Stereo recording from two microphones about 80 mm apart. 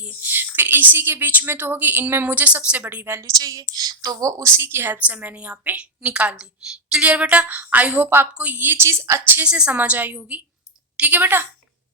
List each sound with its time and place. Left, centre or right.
0.0 s a woman's voice: centre
3.2 s a woman's voice: right
9.4 s a woman's voice: centre